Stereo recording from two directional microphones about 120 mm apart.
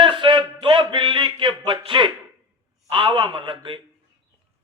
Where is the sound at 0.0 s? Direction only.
45° right (ahead or behind).